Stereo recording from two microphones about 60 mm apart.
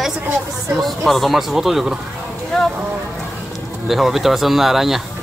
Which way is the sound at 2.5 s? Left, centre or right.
Centre.